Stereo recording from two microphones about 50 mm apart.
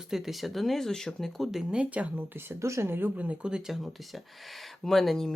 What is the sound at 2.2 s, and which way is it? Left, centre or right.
Speech, right.